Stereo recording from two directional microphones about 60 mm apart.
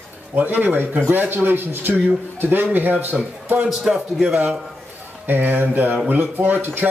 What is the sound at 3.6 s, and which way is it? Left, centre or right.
Speech, centre.